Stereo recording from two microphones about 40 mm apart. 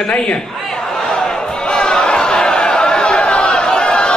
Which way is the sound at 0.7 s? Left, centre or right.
Centre.